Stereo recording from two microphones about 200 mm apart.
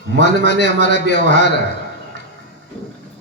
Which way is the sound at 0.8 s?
60° left (ahead or behind).